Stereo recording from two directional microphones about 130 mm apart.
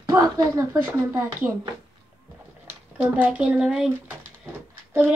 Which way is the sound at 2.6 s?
10° right (ahead or behind).